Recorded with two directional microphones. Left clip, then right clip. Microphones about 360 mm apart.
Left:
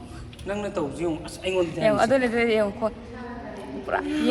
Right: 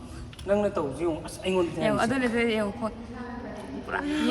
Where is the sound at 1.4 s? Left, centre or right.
Centre.